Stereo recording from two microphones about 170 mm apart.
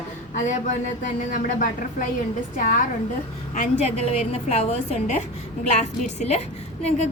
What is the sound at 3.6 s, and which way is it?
A woman's voice, 40° left (ahead or behind).